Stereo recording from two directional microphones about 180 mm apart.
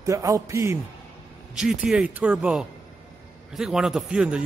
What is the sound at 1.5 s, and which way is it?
A man's voice, 5° right (ahead or behind).